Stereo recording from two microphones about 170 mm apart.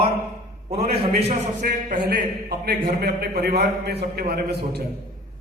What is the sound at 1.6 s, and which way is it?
A man's voice, 50° right (ahead or behind).